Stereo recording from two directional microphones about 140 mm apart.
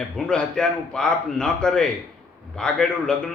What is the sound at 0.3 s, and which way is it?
A man's voice, 5° left (ahead or behind).